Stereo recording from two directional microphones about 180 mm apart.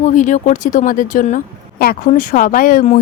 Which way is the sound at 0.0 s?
45° left (ahead or behind).